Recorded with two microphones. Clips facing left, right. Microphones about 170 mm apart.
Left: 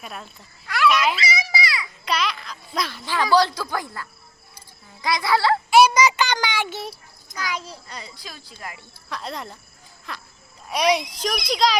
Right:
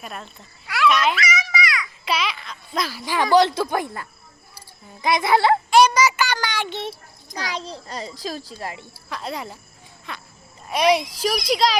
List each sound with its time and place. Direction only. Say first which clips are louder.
0.0 s a sound: right 1 dB; centre (ahead or behind)
1.1 s children playing: right 1 dB; 30° left (ahead or behind)
2.0 s babbling: even; 5° right (ahead or behind)
3.0 s speech: right 2 dB; 15° right (ahead or behind)
5.7 s a child's voice: left 2 dB; 10° left (ahead or behind)
7.3 s speech: right 1 dB; 35° right (ahead or behind)
9.0 s a child's voice: right 2 dB; centre (ahead or behind)